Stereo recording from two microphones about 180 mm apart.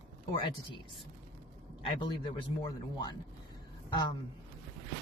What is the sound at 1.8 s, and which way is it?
A man's voice, 25° left (ahead or behind).